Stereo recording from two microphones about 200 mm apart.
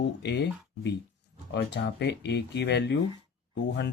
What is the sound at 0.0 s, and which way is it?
Speech, 60° left (ahead or behind).